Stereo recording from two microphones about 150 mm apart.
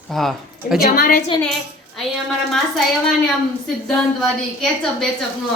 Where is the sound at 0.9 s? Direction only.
70° left (ahead or behind).